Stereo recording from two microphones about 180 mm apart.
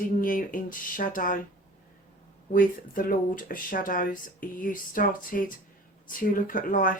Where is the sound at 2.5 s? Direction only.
50° left (ahead or behind).